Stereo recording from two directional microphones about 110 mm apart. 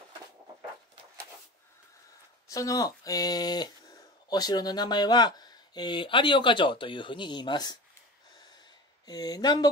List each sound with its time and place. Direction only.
2.5 s speech: 30° left (ahead or behind)
9.0 s speech: 35° left (ahead or behind)